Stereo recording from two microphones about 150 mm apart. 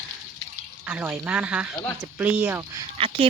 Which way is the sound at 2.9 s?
35° right (ahead or behind).